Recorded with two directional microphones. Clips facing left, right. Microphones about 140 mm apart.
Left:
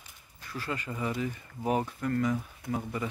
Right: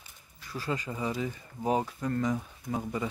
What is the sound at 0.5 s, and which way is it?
Speech, 15° right (ahead or behind).